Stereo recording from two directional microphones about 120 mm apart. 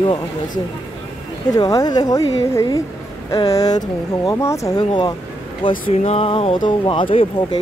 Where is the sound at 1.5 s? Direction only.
30° left (ahead or behind).